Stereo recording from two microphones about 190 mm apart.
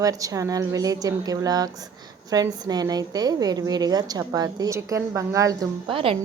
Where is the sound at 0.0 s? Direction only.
20° right (ahead or behind).